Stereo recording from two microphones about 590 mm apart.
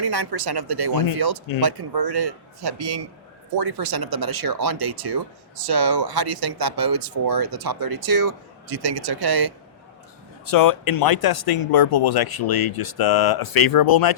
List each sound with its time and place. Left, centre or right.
0.0 s speech: right
10.5 s speech: left